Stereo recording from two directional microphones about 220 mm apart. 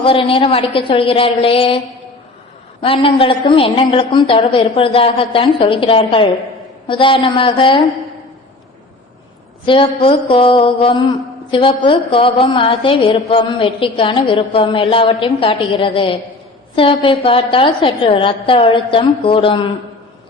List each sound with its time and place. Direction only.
0.0 s mantra: 25° left (ahead or behind)
2.8 s mantra: 25° left (ahead or behind)
9.6 s mantra: 25° left (ahead or behind)